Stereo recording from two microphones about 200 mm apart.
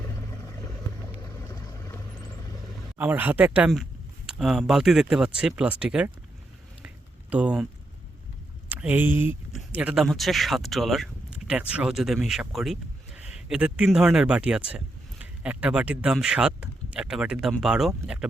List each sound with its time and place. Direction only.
0.3 s vehicle: 15° left (ahead or behind)
1.1 s boat: 20° left (ahead or behind)
3.0 s speech: 10° right (ahead or behind)
6.8 s a sound: 5° right (ahead or behind)
8.7 s speech: 10° right (ahead or behind)